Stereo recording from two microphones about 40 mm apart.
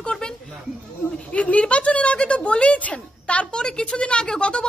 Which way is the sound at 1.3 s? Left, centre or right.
Left.